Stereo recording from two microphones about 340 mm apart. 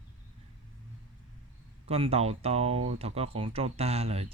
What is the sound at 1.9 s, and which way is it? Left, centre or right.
Speech, centre.